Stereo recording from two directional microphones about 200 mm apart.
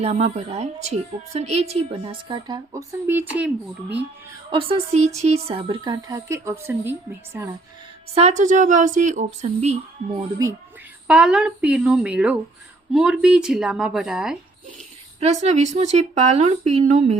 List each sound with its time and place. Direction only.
0.0 s speech: 30° right (ahead or behind)
2.2 s speech: 20° right (ahead or behind)
4.5 s speech: 30° right (ahead or behind); by 6.9 s 10° right (ahead or behind)
8.1 s speech: 35° right (ahead or behind)
10.4 s speech: 20° right (ahead or behind)
11.1 s a woman's voice: 5° right (ahead or behind)
15.2 s speech: 35° right (ahead or behind)